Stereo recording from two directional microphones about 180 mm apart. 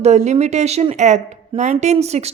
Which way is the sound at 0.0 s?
40° right (ahead or behind).